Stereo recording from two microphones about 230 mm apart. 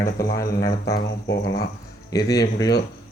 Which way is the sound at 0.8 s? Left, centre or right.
Left.